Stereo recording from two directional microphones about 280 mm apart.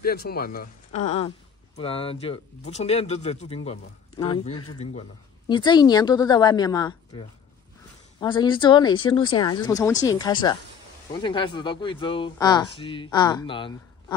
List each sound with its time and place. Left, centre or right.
0.0 s speech: left; by 4.6 s centre
4.6 s speech: left
5.5 s speech: centre